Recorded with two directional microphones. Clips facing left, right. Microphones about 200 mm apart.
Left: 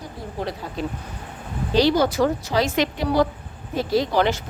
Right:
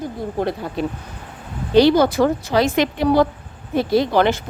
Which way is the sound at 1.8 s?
55° right (ahead or behind).